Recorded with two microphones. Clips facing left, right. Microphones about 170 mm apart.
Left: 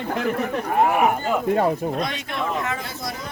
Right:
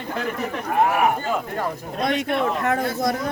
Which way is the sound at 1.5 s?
65° left (ahead or behind).